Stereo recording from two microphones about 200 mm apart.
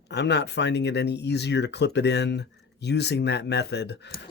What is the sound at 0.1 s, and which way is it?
Speech, 60° left (ahead or behind).